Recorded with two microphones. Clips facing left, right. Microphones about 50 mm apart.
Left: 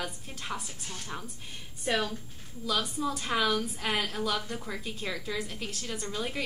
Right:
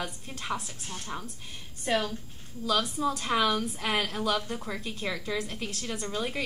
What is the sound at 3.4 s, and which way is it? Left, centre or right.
A woman's voice, centre.